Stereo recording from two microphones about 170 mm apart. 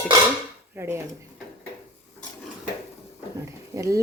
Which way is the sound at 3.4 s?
20° right (ahead or behind).